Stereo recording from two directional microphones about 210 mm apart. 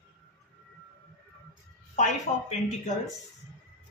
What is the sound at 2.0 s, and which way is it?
Speech, 35° left (ahead or behind).